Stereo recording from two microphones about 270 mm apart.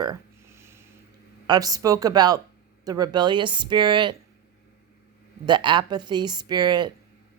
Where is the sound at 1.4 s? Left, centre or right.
Centre.